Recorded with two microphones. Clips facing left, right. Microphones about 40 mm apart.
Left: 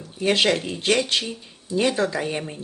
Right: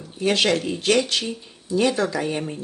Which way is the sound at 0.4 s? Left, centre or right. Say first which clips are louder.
Even; centre.